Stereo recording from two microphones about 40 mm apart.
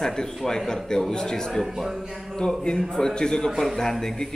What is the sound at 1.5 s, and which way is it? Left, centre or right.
Speech, centre.